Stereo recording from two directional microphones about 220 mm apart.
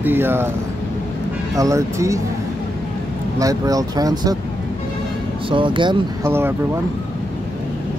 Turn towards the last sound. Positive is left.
turn(degrees=-20)  # may be behind; listen again after turning